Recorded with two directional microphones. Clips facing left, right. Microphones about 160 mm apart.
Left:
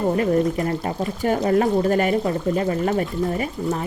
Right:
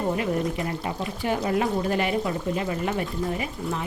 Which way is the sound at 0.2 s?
45° left (ahead or behind).